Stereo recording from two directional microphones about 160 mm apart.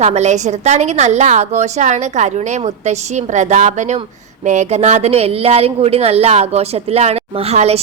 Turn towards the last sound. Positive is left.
turn(degrees=-40)  # may be behind; listen again after turning